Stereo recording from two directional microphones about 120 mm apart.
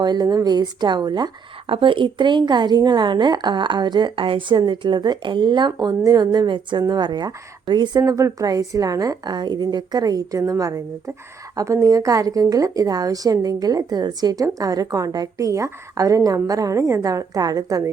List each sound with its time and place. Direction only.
0.0 s a woman's voice: 35° right (ahead or behind)